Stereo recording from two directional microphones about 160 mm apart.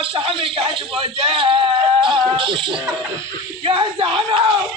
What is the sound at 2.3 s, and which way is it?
Speech, 30° right (ahead or behind).